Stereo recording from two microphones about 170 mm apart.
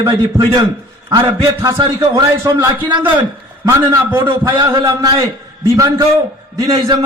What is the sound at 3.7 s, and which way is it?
Speech, 15° right (ahead or behind).